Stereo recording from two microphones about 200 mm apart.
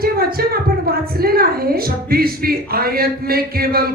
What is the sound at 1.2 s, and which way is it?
A woman's voice, 50° right (ahead or behind).